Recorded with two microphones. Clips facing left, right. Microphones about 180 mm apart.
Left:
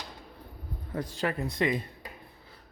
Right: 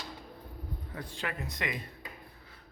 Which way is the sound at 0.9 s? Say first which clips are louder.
Left 8 dB; 40° left (ahead or behind).